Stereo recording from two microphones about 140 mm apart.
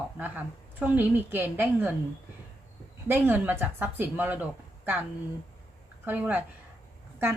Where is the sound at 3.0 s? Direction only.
15° right (ahead or behind).